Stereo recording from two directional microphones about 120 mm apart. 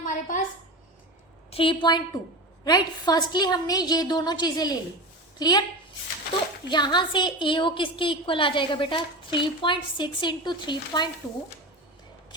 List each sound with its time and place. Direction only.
0.0 s a sound: 90° left
1.5 s a woman's voice: 50° left (ahead or behind)
6.7 s a woman's voice: 40° left (ahead or behind)